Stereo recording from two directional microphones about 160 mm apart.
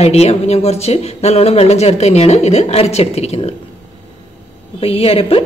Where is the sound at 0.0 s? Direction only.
40° left (ahead or behind).